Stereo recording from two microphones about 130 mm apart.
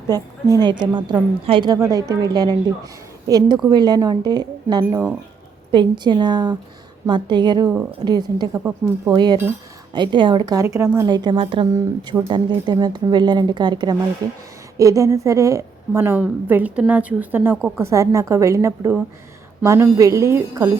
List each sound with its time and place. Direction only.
0.1 s speech: 25° right (ahead or behind)
1.7 s a woman's voice: 25° right (ahead or behind)
11.0 s a woman's voice: 35° right (ahead or behind)